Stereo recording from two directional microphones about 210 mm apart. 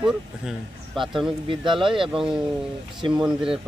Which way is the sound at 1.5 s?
25° right (ahead or behind).